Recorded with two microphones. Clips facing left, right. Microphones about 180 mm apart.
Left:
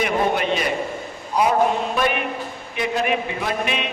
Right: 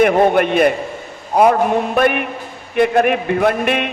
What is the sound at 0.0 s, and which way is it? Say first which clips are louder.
A man's voice: right 8 dB; 55° right (ahead or behind).